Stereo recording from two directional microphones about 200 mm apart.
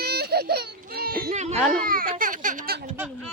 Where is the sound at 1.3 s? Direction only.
35° right (ahead or behind).